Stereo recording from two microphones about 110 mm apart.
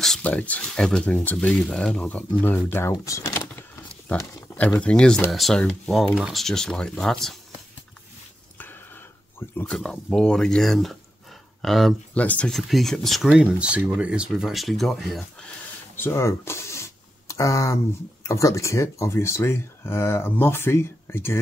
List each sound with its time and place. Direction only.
0.0 s speech: 10° left (ahead or behind)
2.9 s a sound: 30° left (ahead or behind)
4.6 s speech: 10° left (ahead or behind)
9.7 s speech: 5° left (ahead or behind)
12.1 s speech: 15° left (ahead or behind)
12.5 s speech: centre (ahead or behind)
13.3 s speech: 10° right (ahead or behind)
16.0 s a sound: 25° left (ahead or behind)
18.2 s speech: 30° left (ahead or behind)